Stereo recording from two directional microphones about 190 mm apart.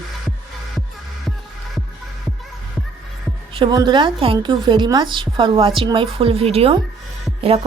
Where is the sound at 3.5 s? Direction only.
25° right (ahead or behind).